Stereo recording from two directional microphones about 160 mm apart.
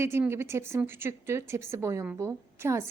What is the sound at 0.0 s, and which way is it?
Speech, 15° right (ahead or behind).